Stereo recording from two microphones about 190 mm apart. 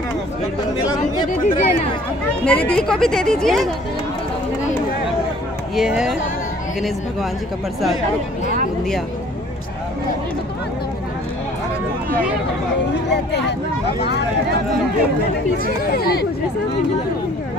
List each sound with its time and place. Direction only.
0.9 s chatter: 45° left (ahead or behind)
2.4 s speech: 5° left (ahead or behind)
5.8 s speech: 5° right (ahead or behind)
12.9 s speech: 65° left (ahead or behind)
15.6 s speech: 55° left (ahead or behind)